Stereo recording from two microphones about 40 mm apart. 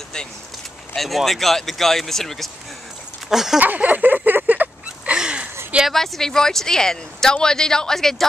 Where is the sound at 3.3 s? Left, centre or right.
Centre.